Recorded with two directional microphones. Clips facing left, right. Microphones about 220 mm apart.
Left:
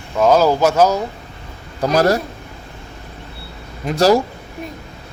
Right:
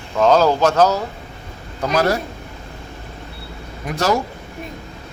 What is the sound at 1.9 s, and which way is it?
Speech, 40° left (ahead or behind).